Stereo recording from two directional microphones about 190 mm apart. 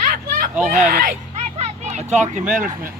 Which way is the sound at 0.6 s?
40° right (ahead or behind).